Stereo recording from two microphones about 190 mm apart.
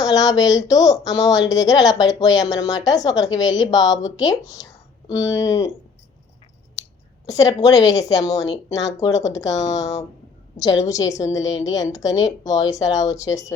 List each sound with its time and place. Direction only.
0.0 s a woman's voice: 20° left (ahead or behind)
7.3 s a woman's voice: 20° left (ahead or behind)